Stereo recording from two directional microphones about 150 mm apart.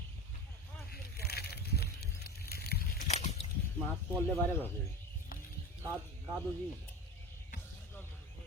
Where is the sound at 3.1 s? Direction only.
45° left (ahead or behind).